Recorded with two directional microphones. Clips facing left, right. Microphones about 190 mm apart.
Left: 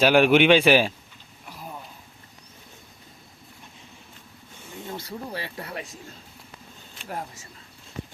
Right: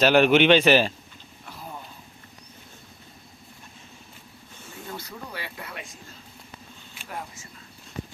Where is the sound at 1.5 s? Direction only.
10° left (ahead or behind).